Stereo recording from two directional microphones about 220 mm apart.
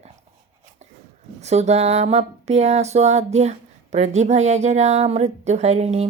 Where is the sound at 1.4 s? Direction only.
30° right (ahead or behind).